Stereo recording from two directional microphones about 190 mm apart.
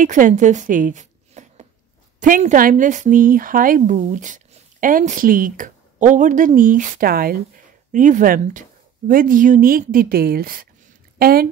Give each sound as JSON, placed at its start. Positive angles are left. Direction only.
{"t": 0.0, "sound": "a woman's voice", "side_deg": -40}
{"t": 7.9, "sound": "a woman's voice", "side_deg": -40}